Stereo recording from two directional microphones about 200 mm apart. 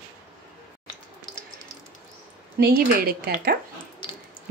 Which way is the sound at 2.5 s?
50° right (ahead or behind).